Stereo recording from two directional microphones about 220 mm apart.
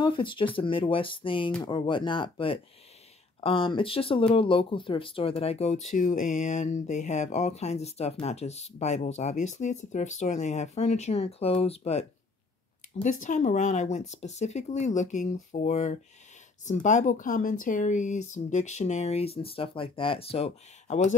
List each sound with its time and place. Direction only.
0.0 s speech: 20° left (ahead or behind)